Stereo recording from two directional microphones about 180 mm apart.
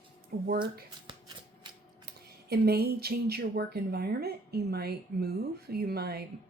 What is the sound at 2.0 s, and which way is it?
Speech, 60° right (ahead or behind).